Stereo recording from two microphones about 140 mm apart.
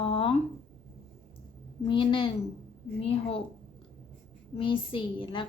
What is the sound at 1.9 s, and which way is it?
A woman's voice, 35° left (ahead or behind).